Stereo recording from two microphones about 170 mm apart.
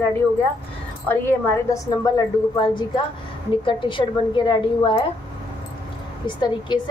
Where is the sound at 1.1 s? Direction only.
15° left (ahead or behind).